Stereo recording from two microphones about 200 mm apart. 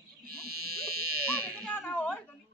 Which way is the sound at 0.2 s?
50° right (ahead or behind).